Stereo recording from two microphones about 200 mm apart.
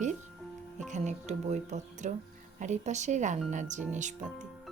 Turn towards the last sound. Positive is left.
turn(degrees=-35)  # may be behind; listen again after turning